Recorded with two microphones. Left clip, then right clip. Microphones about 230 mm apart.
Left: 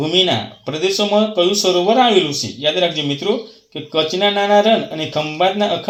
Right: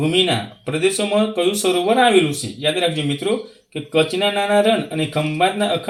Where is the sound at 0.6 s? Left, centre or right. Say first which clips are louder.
Left 1 dB; centre.